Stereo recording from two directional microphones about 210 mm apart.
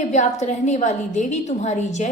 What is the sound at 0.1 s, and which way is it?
A woman's voice, 35° left (ahead or behind).